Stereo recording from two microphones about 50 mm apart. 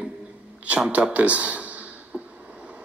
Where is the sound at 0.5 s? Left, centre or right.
Right.